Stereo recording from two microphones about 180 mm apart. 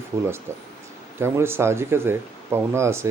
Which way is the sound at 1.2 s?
15° right (ahead or behind).